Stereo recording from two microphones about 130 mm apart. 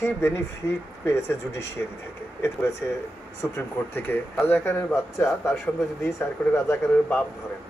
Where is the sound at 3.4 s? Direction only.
20° left (ahead or behind).